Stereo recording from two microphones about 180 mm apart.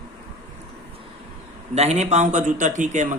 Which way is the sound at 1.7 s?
35° right (ahead or behind).